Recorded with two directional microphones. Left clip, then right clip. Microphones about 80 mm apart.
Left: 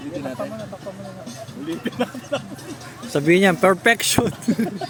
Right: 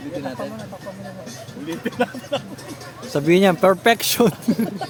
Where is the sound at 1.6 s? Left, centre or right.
Centre.